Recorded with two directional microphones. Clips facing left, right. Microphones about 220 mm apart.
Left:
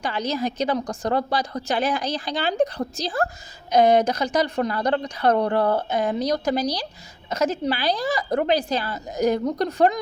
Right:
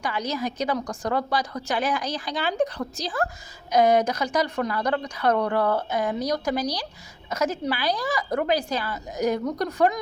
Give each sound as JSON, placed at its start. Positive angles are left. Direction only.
{"t": 0.0, "sound": "a woman's voice", "side_deg": 25}